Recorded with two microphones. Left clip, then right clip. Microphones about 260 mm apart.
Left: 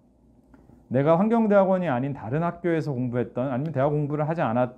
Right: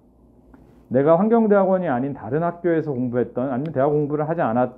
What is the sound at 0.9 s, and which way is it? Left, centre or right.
Speech, left.